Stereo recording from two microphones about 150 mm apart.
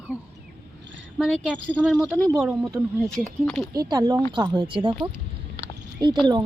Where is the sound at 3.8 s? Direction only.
25° right (ahead or behind).